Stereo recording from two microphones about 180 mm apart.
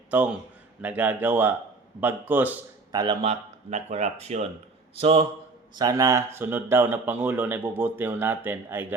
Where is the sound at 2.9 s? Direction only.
20° right (ahead or behind).